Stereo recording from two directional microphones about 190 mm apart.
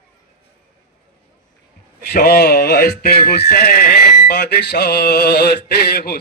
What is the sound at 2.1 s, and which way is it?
A man's voice, 55° left (ahead or behind).